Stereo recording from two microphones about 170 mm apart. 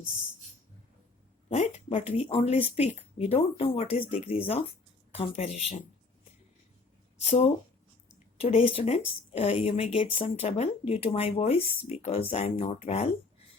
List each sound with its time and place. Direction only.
1.5 s speech: 40° left (ahead or behind)
7.2 s speech: 40° left (ahead or behind)